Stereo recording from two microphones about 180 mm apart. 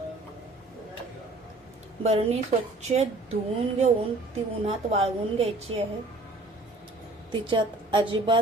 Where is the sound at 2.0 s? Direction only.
35° right (ahead or behind).